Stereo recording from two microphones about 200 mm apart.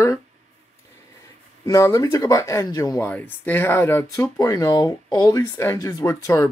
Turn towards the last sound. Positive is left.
turn(degrees=15)  # may be behind; listen again after turning